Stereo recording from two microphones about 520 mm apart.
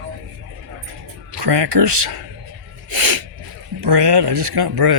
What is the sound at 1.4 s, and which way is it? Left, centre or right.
Speech, right.